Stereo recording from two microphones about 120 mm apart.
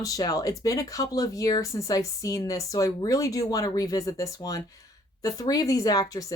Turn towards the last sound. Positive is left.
turn(degrees=30)  # may be behind; listen again after turning